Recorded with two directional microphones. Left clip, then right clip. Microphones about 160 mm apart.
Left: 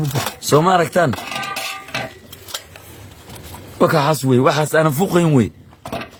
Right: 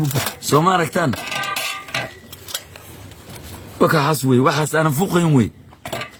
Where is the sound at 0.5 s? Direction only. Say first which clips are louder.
Left 2 dB; 65° left (ahead or behind).